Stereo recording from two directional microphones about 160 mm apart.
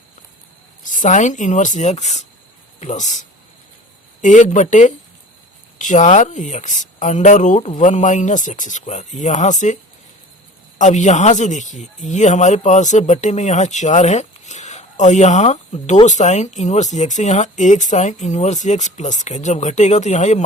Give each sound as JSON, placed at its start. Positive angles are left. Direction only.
{"t": 0.9, "sound": "speech", "side_deg": 50}
{"t": 10.8, "sound": "speech", "side_deg": 50}